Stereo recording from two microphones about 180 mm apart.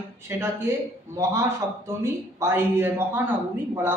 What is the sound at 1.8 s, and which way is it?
A man's voice, 15° right (ahead or behind).